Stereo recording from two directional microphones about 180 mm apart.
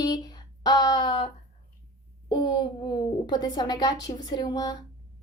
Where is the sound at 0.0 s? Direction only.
20° left (ahead or behind).